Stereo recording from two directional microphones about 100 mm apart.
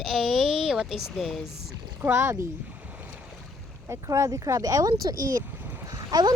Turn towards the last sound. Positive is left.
turn(degrees=-40)  # may be behind; listen again after turning